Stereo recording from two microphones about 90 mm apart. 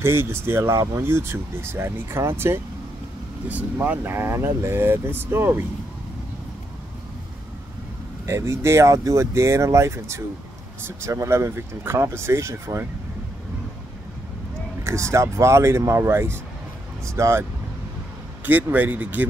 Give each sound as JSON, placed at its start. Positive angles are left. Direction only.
{"t": 0.0, "sound": "speech", "side_deg": -25}
{"t": 8.3, "sound": "speech", "side_deg": -35}
{"t": 14.8, "sound": "speech", "side_deg": -30}
{"t": 18.4, "sound": "speech", "side_deg": -20}